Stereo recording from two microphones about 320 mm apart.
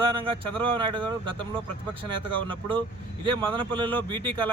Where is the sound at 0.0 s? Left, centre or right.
Centre.